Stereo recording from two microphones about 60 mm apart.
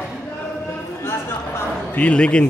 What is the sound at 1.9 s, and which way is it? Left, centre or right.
Speech, left.